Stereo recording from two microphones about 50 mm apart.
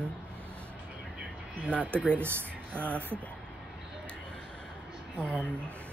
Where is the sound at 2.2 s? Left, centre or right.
Right.